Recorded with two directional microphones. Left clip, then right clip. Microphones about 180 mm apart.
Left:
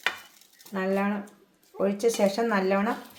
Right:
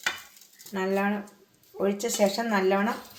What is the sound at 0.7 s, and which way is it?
Speech, 40° left (ahead or behind).